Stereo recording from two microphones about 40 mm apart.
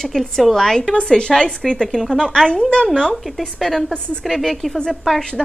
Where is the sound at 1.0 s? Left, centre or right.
Left.